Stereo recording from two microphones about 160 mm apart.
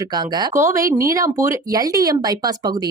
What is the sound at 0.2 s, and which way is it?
Speech, 20° right (ahead or behind).